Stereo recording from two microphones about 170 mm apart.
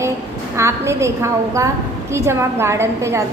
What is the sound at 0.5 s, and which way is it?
A woman's voice, 15° right (ahead or behind).